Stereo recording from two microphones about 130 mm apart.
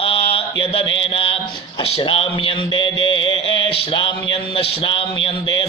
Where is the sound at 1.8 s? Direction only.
45° left (ahead or behind).